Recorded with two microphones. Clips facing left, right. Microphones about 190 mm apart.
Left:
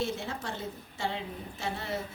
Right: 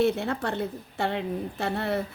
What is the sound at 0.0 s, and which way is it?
A woman's voice, 60° right (ahead or behind).